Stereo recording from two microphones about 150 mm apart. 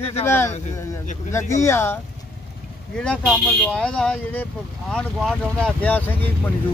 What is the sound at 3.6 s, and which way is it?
Speech, 5° left (ahead or behind).